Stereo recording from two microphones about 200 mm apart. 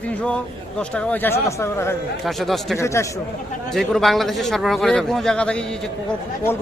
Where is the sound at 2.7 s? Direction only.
15° left (ahead or behind).